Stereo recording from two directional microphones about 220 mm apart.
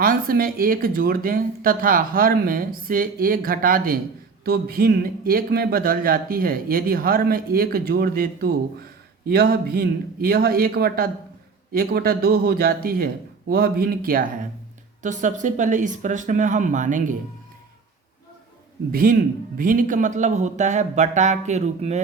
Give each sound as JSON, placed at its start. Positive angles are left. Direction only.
{"t": 0.0, "sound": "speech", "side_deg": -40}
{"t": 18.9, "sound": "speech", "side_deg": -40}